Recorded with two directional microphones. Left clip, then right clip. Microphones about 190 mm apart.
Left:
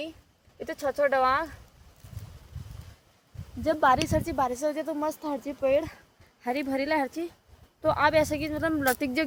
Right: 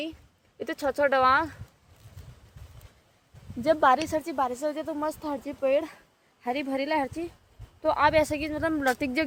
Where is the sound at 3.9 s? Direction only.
5° right (ahead or behind).